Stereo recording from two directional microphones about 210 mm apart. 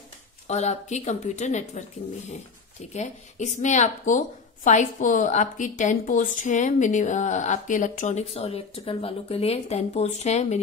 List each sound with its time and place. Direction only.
0.5 s a woman's voice: 35° left (ahead or behind)